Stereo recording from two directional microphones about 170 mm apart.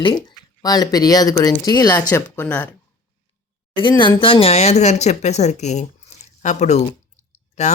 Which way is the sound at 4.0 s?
30° left (ahead or behind).